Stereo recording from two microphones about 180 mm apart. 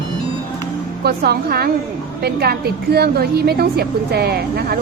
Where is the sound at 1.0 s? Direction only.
60° right (ahead or behind).